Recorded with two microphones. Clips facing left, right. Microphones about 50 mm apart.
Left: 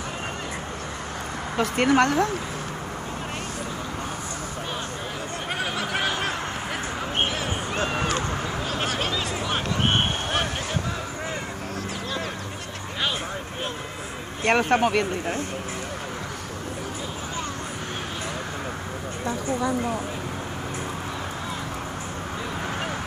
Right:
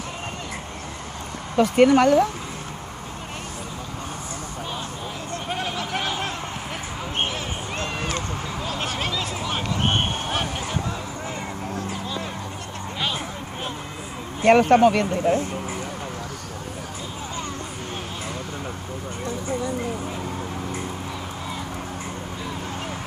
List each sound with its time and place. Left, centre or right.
1.6 s speech: centre
5.5 s a sound: centre
7.7 s run: centre
8.6 s vehicle: centre
9.1 s a sound: centre
14.4 s speech: centre